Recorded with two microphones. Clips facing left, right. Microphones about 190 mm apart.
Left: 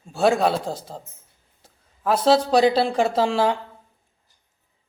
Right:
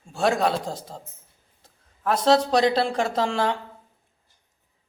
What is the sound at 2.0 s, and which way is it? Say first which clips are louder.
Speech: left 2 dB; 5° left (ahead or behind).